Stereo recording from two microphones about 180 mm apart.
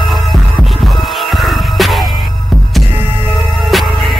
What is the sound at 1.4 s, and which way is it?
Music, centre (ahead or behind).